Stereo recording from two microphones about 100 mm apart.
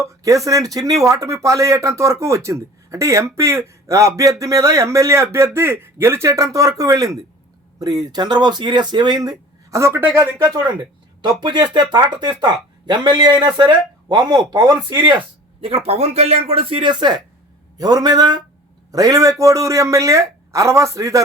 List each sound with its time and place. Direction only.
0.0 s speech: 30° right (ahead or behind)
10.3 s speech: 40° right (ahead or behind)
15.6 s speech: 75° right (ahead or behind); by 21.2 s 35° right (ahead or behind)